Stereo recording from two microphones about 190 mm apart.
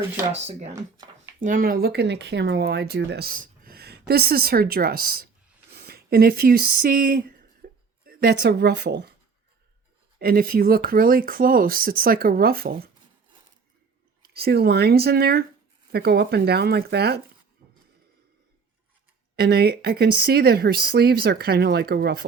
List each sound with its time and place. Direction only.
0.3 s speech: 35° right (ahead or behind)
1.4 s speech: 45° right (ahead or behind)
10.2 s speech: 55° right (ahead or behind)
14.2 s speech: 55° right (ahead or behind)
19.4 s speech: 55° right (ahead or behind)